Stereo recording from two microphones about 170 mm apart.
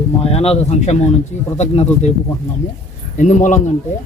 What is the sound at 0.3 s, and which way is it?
Speech, 35° left (ahead or behind).